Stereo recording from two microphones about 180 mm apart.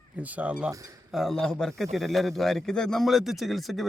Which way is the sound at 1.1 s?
Centre (ahead or behind).